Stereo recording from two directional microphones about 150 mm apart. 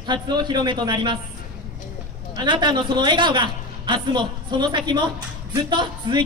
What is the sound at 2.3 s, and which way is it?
A man's voice, 30° right (ahead or behind).